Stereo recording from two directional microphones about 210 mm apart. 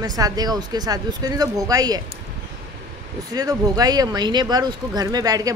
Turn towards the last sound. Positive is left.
turn(degrees=-15)  # may be behind; listen again after turning